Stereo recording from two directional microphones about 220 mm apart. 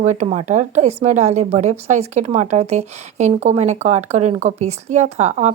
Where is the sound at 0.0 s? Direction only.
30° right (ahead or behind).